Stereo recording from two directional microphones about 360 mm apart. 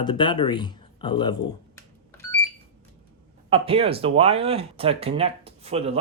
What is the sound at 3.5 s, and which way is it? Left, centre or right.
Speech, centre.